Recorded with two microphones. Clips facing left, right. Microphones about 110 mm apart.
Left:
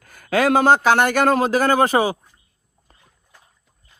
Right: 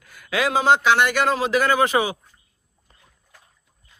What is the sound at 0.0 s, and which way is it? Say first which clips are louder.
A man's voice: left 5 dB; 45° left (ahead or behind).